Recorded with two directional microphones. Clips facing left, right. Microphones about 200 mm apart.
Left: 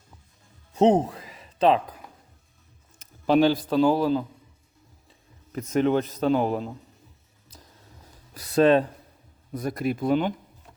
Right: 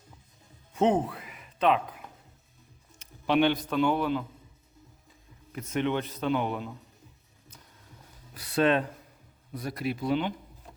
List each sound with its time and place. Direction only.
0.7 s a sound: 40° left (ahead or behind)
3.0 s a man's voice: 40° left (ahead or behind)
8.3 s speech: 40° left (ahead or behind)
9.6 s speech: 45° left (ahead or behind)